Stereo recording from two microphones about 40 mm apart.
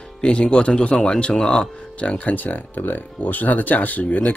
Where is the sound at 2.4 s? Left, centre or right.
Left.